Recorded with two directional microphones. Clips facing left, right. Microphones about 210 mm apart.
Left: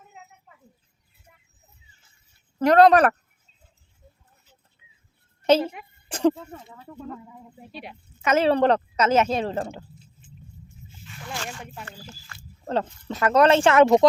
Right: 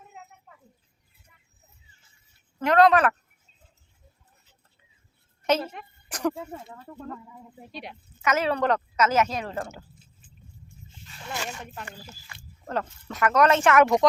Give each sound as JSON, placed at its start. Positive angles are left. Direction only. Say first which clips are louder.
{"t": 2.6, "sound": "speech", "louder": "left 4 dB", "side_deg": 35}
{"t": 5.4, "sound": "a sound", "louder": "left 6 dB", "side_deg": 30}
{"t": 6.7, "sound": "speech", "louder": "left 1 dB", "side_deg": 0}
{"t": 8.2, "sound": "a woman's voice", "louder": "left 5 dB", "side_deg": 30}
{"t": 11.4, "sound": "speech", "louder": "even", "side_deg": 10}
{"t": 11.9, "sound": "speech", "louder": "left 1 dB", "side_deg": -10}
{"t": 12.6, "sound": "a woman's voice", "louder": "left 4 dB", "side_deg": 30}